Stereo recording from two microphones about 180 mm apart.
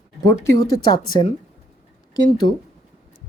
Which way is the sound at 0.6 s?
20° left (ahead or behind).